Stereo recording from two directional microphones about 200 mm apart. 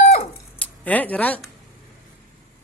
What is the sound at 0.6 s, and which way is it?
Speech, 10° left (ahead or behind).